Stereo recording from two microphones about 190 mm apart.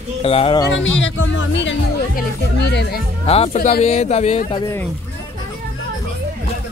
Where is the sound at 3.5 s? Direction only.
45° left (ahead or behind); by 4.8 s 25° left (ahead or behind).